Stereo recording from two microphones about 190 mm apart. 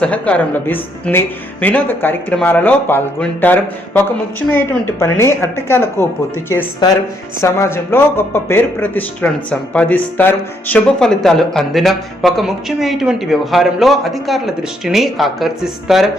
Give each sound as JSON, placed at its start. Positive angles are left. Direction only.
{"t": 0.0, "sound": "speech", "side_deg": 5}